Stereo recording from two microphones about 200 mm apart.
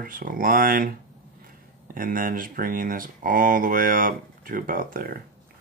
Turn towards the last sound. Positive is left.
turn(degrees=-45)  # may be behind; listen again after turning